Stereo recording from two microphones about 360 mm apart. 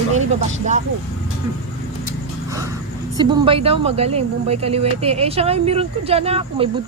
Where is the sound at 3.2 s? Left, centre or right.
Centre.